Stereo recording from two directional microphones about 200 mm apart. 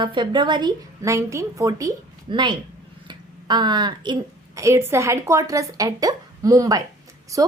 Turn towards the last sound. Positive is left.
turn(degrees=-15)  # may be behind; listen again after turning